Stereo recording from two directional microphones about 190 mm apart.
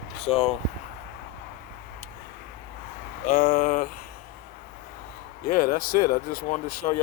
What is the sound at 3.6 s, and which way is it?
Speech, 45° left (ahead or behind).